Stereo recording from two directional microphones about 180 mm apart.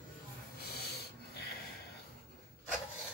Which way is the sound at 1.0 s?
65° left (ahead or behind).